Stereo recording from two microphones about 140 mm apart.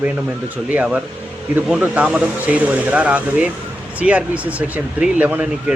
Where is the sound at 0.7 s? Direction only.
10° right (ahead or behind).